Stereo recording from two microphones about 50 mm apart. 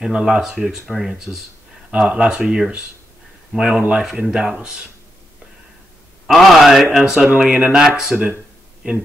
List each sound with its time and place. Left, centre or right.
0.0 s speech: centre
4.2 s speech: centre
6.3 s speech: centre
8.8 s speech: right